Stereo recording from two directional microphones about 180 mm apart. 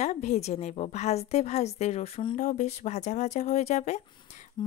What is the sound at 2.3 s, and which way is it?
A woman's voice, 45° left (ahead or behind).